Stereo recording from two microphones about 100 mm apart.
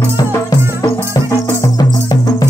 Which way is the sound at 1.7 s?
45° left (ahead or behind).